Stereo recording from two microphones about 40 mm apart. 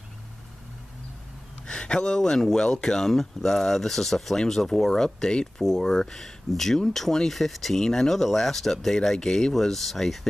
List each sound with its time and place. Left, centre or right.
1.7 s speech: left